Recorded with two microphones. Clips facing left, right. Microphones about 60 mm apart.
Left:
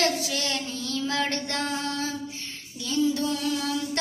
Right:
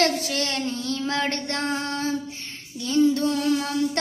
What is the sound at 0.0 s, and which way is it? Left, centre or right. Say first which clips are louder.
Child singing: right 3 dB; right.